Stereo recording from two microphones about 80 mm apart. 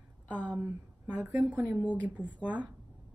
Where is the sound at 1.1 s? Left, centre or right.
Centre.